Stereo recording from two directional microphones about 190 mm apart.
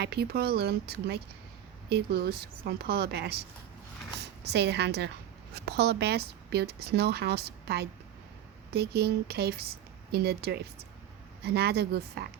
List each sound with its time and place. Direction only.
0.0 s a woman's voice: 55° right (ahead or behind)